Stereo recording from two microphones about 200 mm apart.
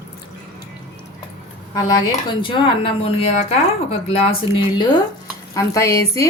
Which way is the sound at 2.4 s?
25° left (ahead or behind).